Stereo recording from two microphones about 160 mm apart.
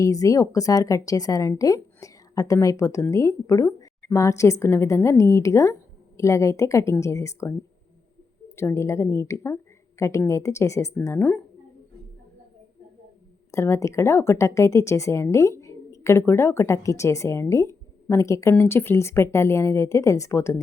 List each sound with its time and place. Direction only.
0.0 s speech: 20° left (ahead or behind)
8.5 s speech: 15° left (ahead or behind)
13.5 s speech: 20° left (ahead or behind)